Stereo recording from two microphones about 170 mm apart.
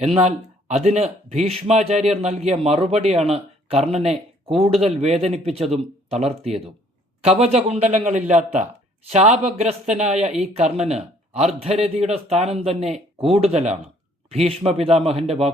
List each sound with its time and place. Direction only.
0.0 s a man's voice: 40° right (ahead or behind)